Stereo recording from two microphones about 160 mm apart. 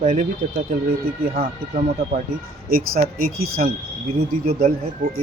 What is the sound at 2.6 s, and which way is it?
Speech, 65° right (ahead or behind).